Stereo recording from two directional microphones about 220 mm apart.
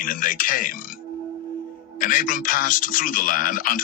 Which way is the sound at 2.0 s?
40° left (ahead or behind).